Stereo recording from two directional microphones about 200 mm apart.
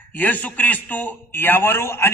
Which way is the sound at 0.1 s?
10° left (ahead or behind).